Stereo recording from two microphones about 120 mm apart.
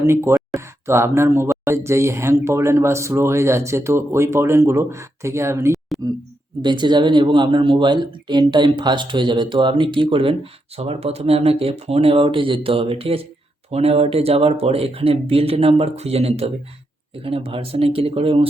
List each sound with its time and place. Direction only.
0.0 s speech: 25° right (ahead or behind)
5.9 s speech: centre (ahead or behind)
6.6 s speech: 40° right (ahead or behind); by 18.4 s 55° right (ahead or behind)